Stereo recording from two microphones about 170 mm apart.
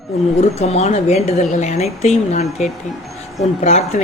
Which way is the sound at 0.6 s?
40° left (ahead or behind).